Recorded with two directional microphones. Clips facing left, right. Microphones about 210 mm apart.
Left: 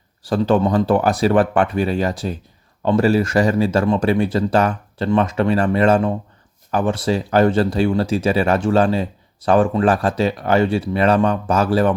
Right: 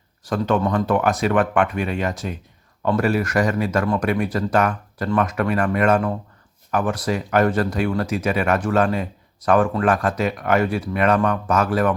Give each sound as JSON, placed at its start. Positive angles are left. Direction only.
{"t": 0.2, "sound": "speech", "side_deg": 30}